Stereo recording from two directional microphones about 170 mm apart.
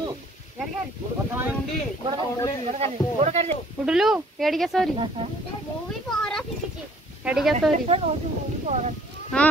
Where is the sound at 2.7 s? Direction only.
40° right (ahead or behind).